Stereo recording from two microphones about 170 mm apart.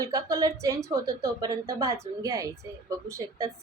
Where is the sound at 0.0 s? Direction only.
20° right (ahead or behind).